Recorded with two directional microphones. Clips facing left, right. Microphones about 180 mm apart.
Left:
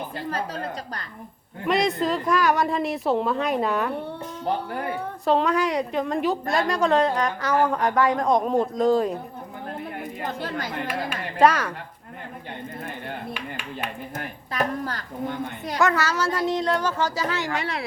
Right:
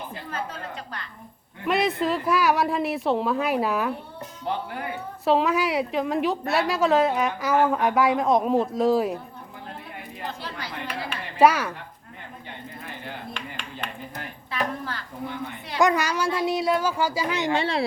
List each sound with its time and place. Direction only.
0.3 s a woman's voice: 35° left (ahead or behind)
1.6 s a woman's voice: centre (ahead or behind)
5.2 s a woman's voice: 5° right (ahead or behind)
10.2 s a woman's voice: 45° left (ahead or behind)
11.3 s speech: 10° right (ahead or behind)
13.3 s a sound: 10° left (ahead or behind)
14.2 s a sound: 45° left (ahead or behind)
15.8 s speech: 15° right (ahead or behind)